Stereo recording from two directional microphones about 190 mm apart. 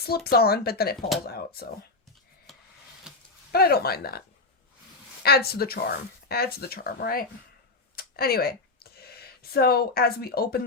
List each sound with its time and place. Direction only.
0.3 s speech: 55° left (ahead or behind)
2.5 s a sound: 5° left (ahead or behind)
3.5 s speech: 55° left (ahead or behind)
5.2 s speech: 55° left (ahead or behind)